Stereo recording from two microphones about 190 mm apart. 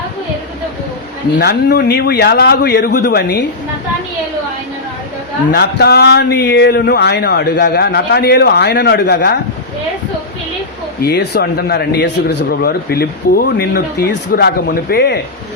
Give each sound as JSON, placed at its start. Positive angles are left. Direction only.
{"t": 1.4, "sound": "speech", "side_deg": 55}
{"t": 5.5, "sound": "speech", "side_deg": 60}
{"t": 11.0, "sound": "speech", "side_deg": 60}